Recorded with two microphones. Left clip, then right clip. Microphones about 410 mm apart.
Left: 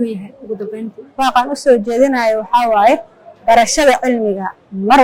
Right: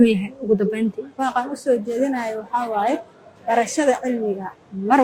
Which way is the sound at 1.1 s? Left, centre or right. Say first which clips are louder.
Left 11 dB; left.